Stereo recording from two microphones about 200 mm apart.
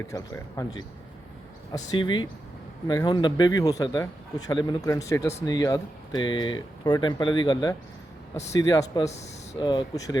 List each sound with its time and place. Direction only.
0.1 s a man's voice: 15° left (ahead or behind)
9.0 s speech: 35° left (ahead or behind)
9.6 s a man's voice: 20° left (ahead or behind)